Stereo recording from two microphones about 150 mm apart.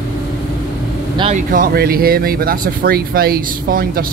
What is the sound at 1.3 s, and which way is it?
Speech, 65° right (ahead or behind).